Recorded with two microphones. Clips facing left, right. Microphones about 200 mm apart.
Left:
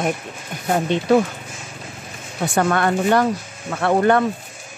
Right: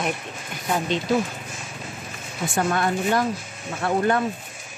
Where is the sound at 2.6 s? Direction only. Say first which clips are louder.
Left 4 dB; 70° left (ahead or behind).